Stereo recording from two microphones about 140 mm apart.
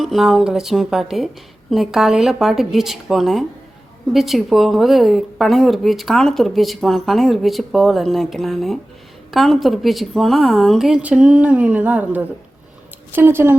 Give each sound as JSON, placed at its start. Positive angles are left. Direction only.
{"t": 0.0, "sound": "a woman's voice", "side_deg": 0}